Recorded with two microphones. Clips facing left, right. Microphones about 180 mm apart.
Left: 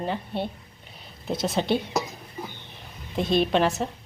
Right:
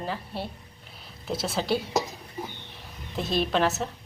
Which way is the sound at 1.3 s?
5° right (ahead or behind).